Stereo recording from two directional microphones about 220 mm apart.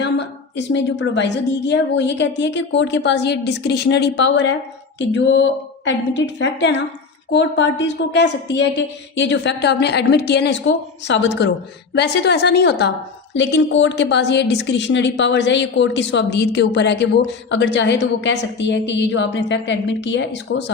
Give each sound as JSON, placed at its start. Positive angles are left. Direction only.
{"t": 0.0, "sound": "a woman's voice", "side_deg": 55}